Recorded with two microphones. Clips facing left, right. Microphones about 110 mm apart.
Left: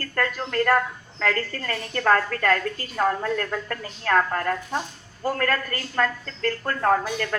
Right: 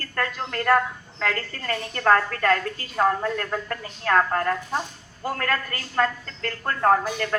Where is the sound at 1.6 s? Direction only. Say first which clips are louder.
Right 3 dB; 35° right (ahead or behind).